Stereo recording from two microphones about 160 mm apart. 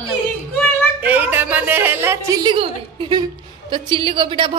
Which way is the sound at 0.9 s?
10° right (ahead or behind).